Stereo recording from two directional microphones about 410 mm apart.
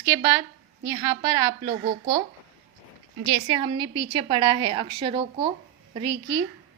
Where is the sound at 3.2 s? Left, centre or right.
Centre.